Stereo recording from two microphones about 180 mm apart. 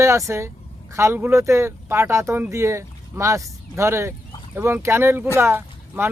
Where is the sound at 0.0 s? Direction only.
15° right (ahead or behind).